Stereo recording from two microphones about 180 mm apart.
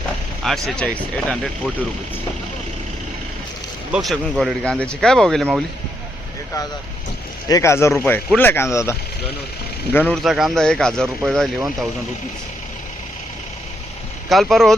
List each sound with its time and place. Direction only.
0.4 s speech: centre (ahead or behind)
3.9 s speech: centre (ahead or behind)
7.4 s speech: 20° left (ahead or behind)
10.2 s speech: centre (ahead or behind)
14.3 s speech: centre (ahead or behind)